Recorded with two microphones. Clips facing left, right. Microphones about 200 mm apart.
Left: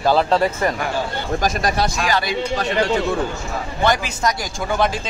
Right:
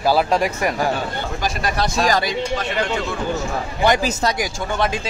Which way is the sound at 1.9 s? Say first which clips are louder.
Right 3 dB; 40° right (ahead or behind).